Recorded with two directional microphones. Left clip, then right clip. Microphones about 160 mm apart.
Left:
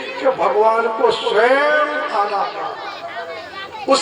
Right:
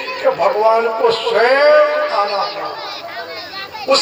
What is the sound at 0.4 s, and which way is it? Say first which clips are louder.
A man's voice: right 2 dB; 40° left (ahead or behind).